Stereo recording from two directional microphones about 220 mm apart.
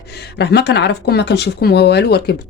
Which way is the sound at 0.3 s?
50° left (ahead or behind).